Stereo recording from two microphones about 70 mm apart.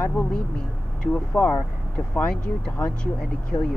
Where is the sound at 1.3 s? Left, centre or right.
Left.